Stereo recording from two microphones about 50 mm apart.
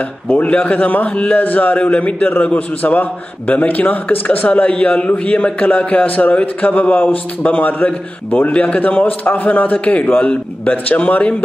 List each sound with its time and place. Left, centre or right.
0.3 s a man's voice: left
4.5 s a man's voice: left